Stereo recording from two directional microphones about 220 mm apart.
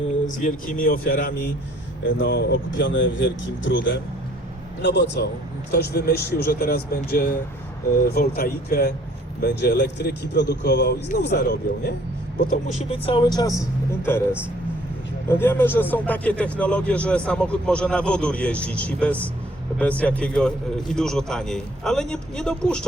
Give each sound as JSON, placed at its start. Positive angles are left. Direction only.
{"t": 0.3, "sound": "speech", "side_deg": 35}
{"t": 2.0, "sound": "speech", "side_deg": 55}
{"t": 12.5, "sound": "speech", "side_deg": 30}
{"t": 15.3, "sound": "speech", "side_deg": 10}